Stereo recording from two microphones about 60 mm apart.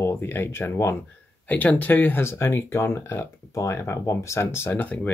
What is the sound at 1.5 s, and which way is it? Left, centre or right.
Speech, left.